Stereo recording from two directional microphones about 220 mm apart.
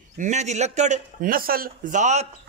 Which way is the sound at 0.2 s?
30° right (ahead or behind).